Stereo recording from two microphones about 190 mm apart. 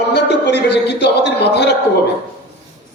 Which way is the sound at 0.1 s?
65° left (ahead or behind).